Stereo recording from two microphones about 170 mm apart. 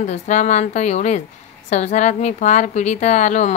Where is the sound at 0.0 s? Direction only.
45° left (ahead or behind).